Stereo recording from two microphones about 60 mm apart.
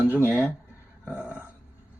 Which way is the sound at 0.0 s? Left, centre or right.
Right.